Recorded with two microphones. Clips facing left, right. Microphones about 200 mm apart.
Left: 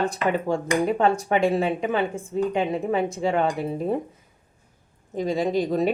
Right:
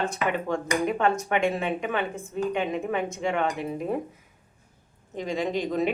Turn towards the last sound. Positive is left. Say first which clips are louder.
# left 4 dB
turn(degrees=35)  # may be behind; listen again after turning